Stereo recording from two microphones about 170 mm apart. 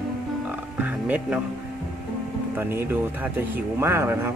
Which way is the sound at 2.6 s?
15° right (ahead or behind).